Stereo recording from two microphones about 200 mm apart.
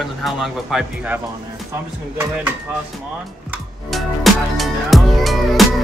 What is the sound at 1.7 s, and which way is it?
Speech, 10° right (ahead or behind).